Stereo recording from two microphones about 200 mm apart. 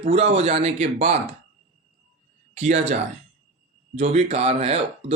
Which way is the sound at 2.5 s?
35° right (ahead or behind).